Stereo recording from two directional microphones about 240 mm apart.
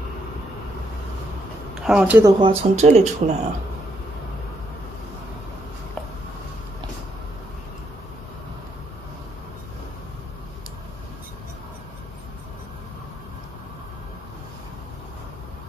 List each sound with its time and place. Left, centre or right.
1.8 s speech: centre
2.4 s speech: right